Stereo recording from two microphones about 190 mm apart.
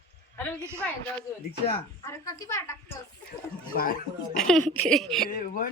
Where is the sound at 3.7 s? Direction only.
50° left (ahead or behind).